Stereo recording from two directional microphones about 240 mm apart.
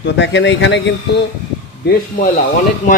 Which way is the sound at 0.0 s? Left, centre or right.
Left.